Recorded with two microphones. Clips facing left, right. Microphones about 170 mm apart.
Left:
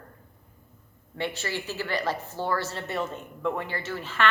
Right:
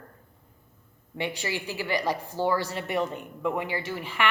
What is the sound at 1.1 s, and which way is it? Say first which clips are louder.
A woman's voice: even; 15° right (ahead or behind).